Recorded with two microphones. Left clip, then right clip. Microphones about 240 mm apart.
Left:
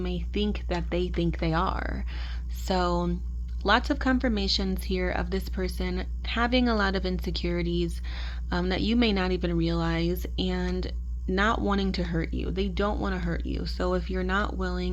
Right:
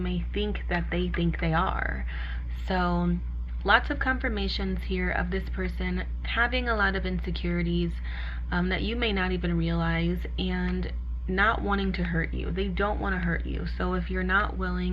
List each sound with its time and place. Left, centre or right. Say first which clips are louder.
0.0 s speech: left 1 dB; left